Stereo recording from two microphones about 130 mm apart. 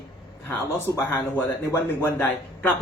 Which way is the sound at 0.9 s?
20° left (ahead or behind).